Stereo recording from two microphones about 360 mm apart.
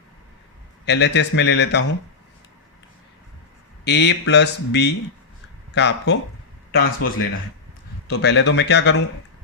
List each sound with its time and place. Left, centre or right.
0.9 s a man's voice: left
3.8 s a man's voice: left